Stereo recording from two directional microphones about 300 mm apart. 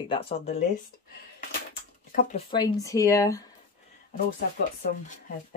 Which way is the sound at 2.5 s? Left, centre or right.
Centre.